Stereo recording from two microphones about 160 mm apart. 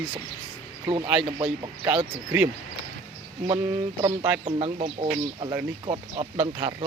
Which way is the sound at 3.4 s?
30° right (ahead or behind).